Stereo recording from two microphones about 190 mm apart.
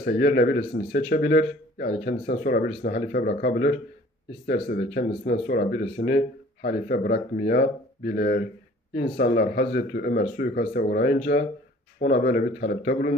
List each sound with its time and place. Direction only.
0.0 s speech: 55° left (ahead or behind)